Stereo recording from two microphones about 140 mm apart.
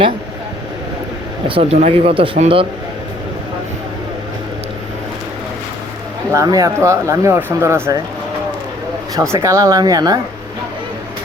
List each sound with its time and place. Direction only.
1.5 s speech: 40° right (ahead or behind)
6.3 s speech: 25° right (ahead or behind)
9.1 s speech: 20° right (ahead or behind)